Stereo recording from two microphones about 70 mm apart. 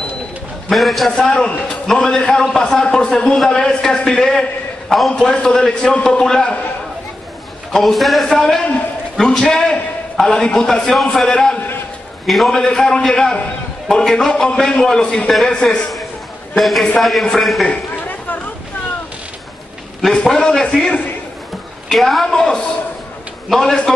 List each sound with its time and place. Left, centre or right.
0.7 s a man's voice: centre
7.7 s a man's voice: centre
16.5 s a man's voice: centre
17.6 s a sound: left
20.2 s a man's voice: centre
21.8 s a man's voice: centre